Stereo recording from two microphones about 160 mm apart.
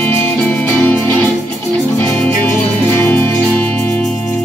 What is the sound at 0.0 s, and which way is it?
Music, 10° left (ahead or behind).